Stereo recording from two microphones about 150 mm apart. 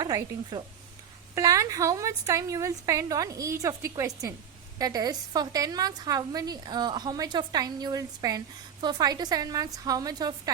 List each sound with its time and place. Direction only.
0.0 s a woman's voice: 25° right (ahead or behind)